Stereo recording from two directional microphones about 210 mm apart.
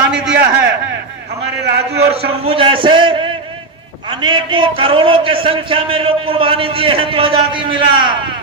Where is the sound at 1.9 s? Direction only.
50° right (ahead or behind).